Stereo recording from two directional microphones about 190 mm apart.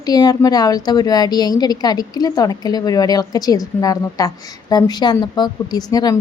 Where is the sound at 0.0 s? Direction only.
20° left (ahead or behind).